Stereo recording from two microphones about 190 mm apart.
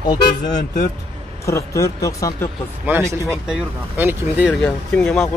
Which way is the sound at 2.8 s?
15° right (ahead or behind).